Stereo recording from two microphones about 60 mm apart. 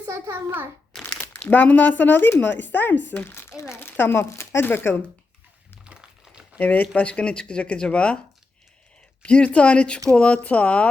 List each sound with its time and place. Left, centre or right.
0.1 s a child's voice: right
1.0 s crumpling: left
1.5 s speech: left
5.8 s crumpling: centre
6.6 s speech: left
9.2 s speech: centre